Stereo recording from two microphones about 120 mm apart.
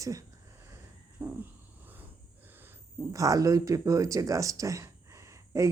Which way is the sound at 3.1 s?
30° right (ahead or behind).